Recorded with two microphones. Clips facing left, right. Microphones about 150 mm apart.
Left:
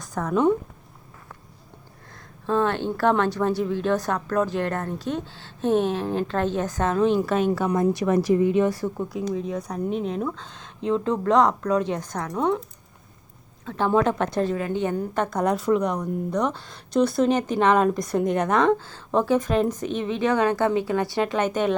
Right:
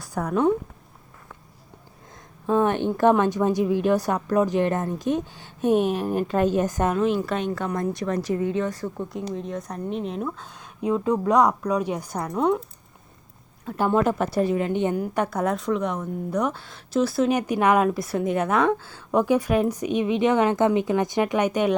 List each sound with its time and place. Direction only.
0.0 s a sound: 10° right (ahead or behind)
0.3 s a woman's voice: centre (ahead or behind)
2.5 s speech: 15° right (ahead or behind)
6.9 s a woman's voice: centre (ahead or behind)
13.7 s speech: 10° right (ahead or behind)
14.5 s a woman's voice: 20° right (ahead or behind)